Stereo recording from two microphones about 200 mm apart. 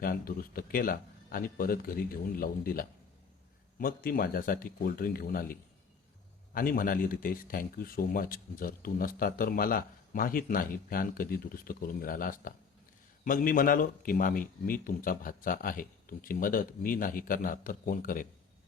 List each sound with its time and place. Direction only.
0.0 s speech: 45° left (ahead or behind)